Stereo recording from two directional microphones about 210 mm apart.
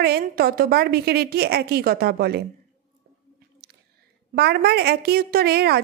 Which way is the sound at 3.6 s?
45° right (ahead or behind).